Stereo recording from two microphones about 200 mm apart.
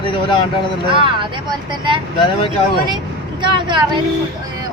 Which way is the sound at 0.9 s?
25° right (ahead or behind).